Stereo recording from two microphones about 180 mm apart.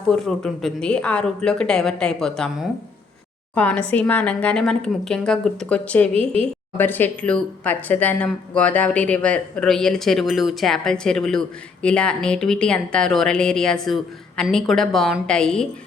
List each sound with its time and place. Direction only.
0.1 s speech: 5° left (ahead or behind)
6.1 s a woman's voice: 30° right (ahead or behind)
6.7 s speech: 10° left (ahead or behind)